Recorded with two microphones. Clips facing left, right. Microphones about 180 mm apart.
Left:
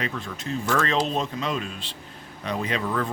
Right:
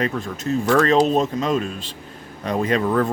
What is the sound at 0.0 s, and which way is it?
Speech, 45° right (ahead or behind).